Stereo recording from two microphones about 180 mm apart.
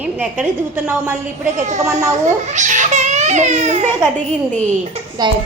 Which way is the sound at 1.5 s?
40° right (ahead or behind).